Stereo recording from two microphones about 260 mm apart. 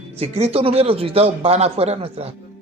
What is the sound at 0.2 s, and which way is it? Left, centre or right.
Speech, right.